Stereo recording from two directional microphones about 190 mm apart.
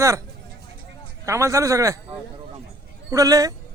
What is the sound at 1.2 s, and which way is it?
Speech, 15° right (ahead or behind).